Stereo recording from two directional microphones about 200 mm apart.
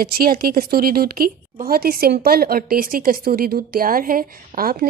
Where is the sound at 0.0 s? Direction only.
50° right (ahead or behind).